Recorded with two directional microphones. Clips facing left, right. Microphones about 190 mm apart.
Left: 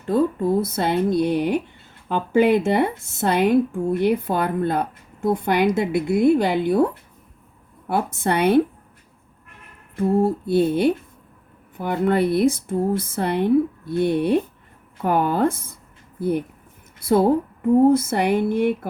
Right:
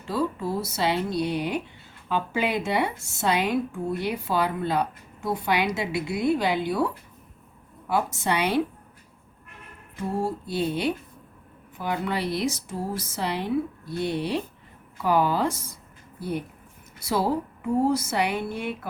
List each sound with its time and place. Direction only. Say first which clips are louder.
0.0 s a woman's voice: left 7 dB; 50° left (ahead or behind)
9.9 s a woman's voice: left 9 dB; 55° left (ahead or behind)
17.0 s a woman's voice: left 8 dB; 55° left (ahead or behind)